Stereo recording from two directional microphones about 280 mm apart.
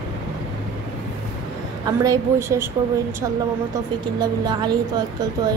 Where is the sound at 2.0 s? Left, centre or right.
Centre.